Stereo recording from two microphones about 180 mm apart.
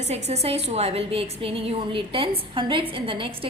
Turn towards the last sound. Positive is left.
turn(degrees=-30)  # may be behind; listen again after turning